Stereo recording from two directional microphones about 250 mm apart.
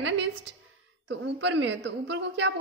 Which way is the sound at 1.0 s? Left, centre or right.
Right.